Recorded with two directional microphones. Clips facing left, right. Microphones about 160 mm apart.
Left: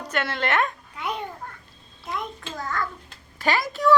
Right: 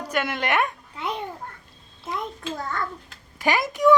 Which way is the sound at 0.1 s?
10° right (ahead or behind).